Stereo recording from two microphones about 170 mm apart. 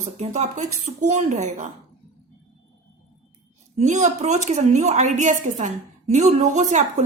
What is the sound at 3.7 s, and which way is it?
A woman's voice, 45° right (ahead or behind).